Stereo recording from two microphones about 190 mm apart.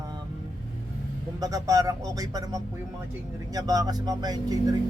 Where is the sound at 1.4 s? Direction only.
20° right (ahead or behind).